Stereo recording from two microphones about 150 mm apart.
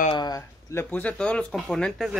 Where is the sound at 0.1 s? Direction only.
30° left (ahead or behind).